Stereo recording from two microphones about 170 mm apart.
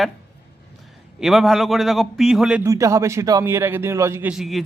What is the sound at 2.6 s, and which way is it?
A man's voice, 20° right (ahead or behind).